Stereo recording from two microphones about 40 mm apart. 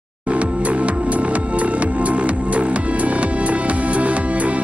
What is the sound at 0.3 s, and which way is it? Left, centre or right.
Music, right.